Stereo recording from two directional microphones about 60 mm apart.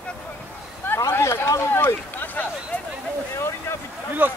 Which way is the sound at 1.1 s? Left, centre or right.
Left.